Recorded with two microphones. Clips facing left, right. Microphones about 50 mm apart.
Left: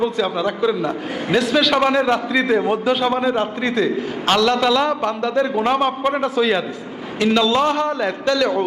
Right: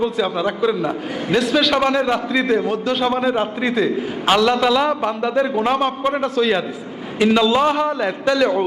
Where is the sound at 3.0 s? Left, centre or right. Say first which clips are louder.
Even; centre.